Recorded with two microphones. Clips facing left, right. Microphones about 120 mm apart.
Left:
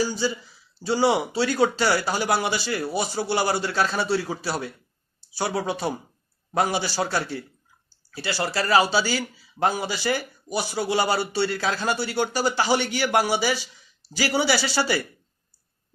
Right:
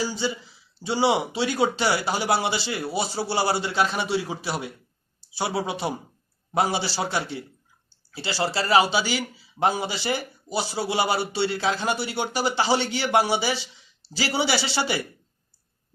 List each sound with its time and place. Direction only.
0.0 s a man's voice: 25° right (ahead or behind)
8.1 s a man's voice: 25° right (ahead or behind)